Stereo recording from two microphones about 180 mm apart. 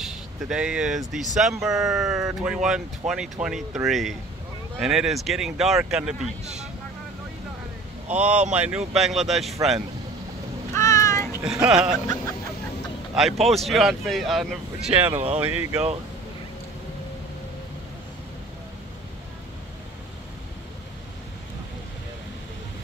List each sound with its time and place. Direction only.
0.0 s speech: 5° right (ahead or behind)
8.1 s speech: 5° right (ahead or behind)
10.7 s a sound: 15° left (ahead or behind)
11.4 s speech: 5° right (ahead or behind)
13.1 s speech: centre (ahead or behind)